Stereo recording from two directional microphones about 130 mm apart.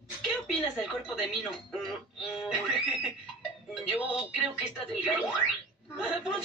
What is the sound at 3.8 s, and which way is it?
A man's voice, 10° right (ahead or behind).